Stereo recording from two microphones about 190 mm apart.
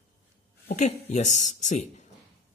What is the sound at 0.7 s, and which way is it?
A woman's voice, 40° left (ahead or behind).